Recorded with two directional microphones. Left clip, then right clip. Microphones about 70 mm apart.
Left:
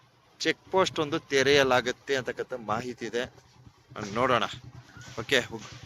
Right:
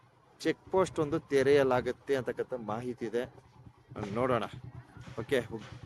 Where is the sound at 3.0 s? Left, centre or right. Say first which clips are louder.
Left 2 dB; right.